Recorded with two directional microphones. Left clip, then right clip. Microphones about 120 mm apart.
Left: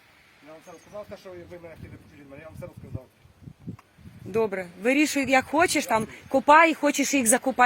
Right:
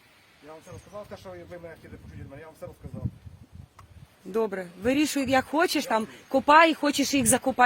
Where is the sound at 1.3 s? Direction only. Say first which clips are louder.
Even; 20° right (ahead or behind).